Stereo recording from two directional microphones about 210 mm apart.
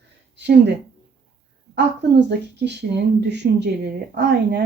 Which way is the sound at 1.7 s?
55° right (ahead or behind).